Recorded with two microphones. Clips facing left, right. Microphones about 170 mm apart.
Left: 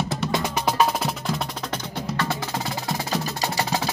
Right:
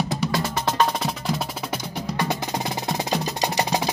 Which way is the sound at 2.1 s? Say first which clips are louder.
Right 2 dB; 15° right (ahead or behind).